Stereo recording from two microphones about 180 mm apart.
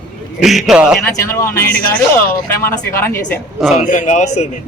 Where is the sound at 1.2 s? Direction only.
15° left (ahead or behind).